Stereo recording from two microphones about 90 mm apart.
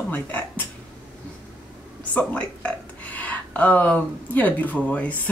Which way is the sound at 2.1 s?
15° left (ahead or behind).